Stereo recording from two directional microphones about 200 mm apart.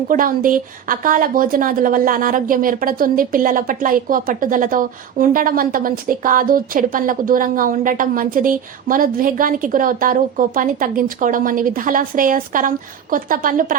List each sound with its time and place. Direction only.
0.1 s speech: 45° right (ahead or behind)